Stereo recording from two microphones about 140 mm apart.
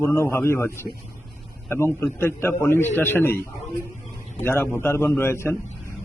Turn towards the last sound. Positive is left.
turn(degrees=15)  # may be behind; listen again after turning